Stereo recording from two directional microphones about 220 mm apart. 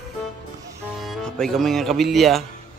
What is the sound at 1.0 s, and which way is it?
Speech, centre (ahead or behind).